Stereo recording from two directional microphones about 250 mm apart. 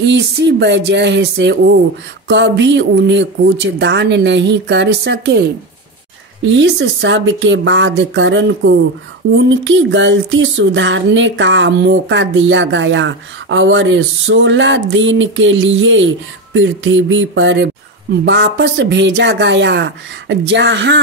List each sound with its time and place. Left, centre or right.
0.0 s speech: right